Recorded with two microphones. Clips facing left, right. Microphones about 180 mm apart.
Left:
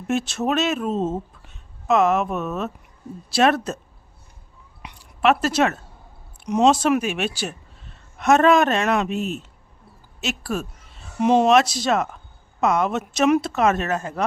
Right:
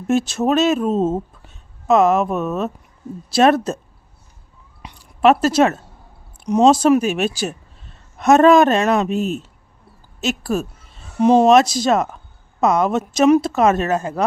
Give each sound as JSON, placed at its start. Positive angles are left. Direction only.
{"t": 0.1, "sound": "speech", "side_deg": -40}
{"t": 4.8, "sound": "a sound", "side_deg": -35}
{"t": 6.4, "sound": "speech", "side_deg": -35}